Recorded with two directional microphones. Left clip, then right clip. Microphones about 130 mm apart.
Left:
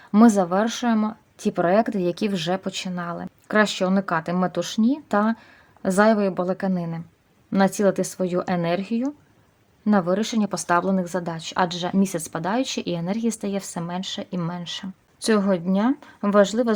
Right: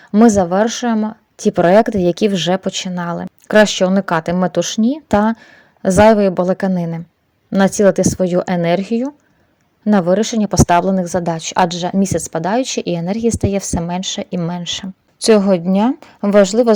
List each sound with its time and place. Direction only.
0.2 s speech: 35° right (ahead or behind); by 7.0 s 55° right (ahead or behind)
7.6 s speech: 40° right (ahead or behind)